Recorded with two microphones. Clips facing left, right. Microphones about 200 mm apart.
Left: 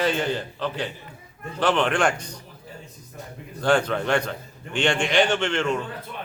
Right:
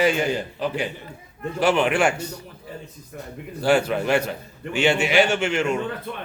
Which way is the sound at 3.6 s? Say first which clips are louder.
Right 2 dB; 10° right (ahead or behind).